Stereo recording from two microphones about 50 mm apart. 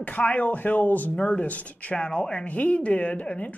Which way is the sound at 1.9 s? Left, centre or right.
Centre.